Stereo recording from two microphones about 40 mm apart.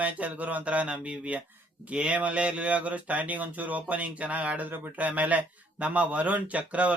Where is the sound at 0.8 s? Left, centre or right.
Right.